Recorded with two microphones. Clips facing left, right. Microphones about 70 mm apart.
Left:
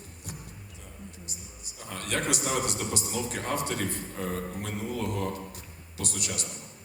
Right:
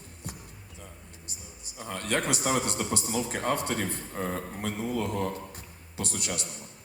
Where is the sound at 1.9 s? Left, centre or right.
Right.